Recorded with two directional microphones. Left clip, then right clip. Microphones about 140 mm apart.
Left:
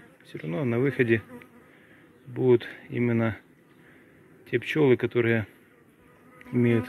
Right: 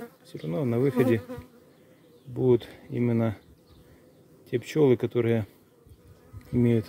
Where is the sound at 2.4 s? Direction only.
35° right (ahead or behind).